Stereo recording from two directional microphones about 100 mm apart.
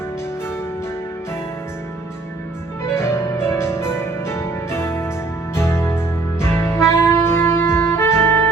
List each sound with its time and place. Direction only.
2.9 s music: 25° left (ahead or behind)
6.4 s saxophone: 25° left (ahead or behind)